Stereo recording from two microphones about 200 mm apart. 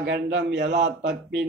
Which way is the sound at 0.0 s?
60° right (ahead or behind).